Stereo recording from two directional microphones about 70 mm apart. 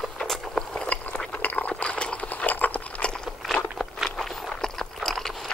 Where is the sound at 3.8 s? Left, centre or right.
Centre.